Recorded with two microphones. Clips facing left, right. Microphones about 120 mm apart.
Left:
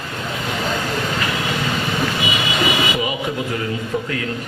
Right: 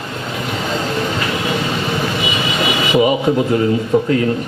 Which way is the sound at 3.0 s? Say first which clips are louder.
Right 9 dB; 25° right (ahead or behind).